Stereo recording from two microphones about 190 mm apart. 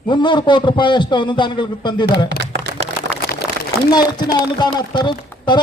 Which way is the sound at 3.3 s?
55° left (ahead or behind).